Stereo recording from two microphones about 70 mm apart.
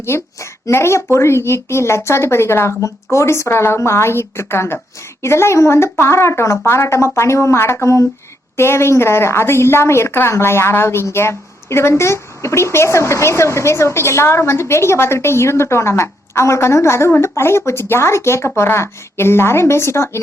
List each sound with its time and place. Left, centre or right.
0.0 s a child's voice: left